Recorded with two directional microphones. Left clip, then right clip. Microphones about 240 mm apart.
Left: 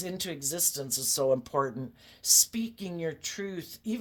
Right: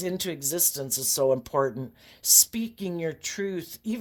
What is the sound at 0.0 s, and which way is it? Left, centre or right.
Speech, right.